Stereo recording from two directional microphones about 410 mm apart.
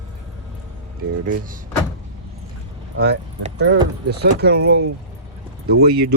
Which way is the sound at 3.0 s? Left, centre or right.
Right.